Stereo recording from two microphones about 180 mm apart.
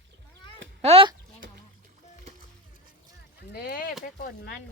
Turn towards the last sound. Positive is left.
turn(degrees=55)  # may be behind; listen again after turning